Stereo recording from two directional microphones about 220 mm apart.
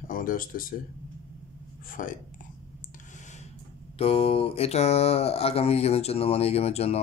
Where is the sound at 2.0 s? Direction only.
35° left (ahead or behind).